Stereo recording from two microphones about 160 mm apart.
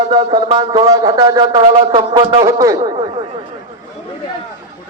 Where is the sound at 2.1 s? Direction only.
35° right (ahead or behind).